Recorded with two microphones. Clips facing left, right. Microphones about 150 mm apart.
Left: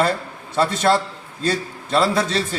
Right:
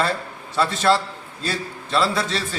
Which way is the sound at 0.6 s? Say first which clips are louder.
Left 1 dB; 45° left (ahead or behind).